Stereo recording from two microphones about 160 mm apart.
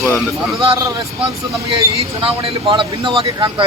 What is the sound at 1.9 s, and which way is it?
Speech, 35° right (ahead or behind).